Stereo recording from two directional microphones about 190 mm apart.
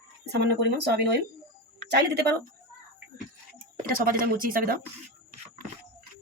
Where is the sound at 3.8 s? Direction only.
50° right (ahead or behind).